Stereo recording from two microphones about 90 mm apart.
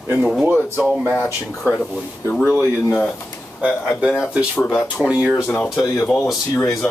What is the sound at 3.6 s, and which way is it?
Speech, centre (ahead or behind).